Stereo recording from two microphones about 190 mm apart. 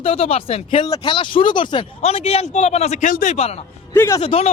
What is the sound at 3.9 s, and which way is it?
Speech, 15° left (ahead or behind).